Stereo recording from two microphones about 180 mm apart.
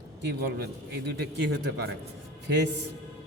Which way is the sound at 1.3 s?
65° right (ahead or behind).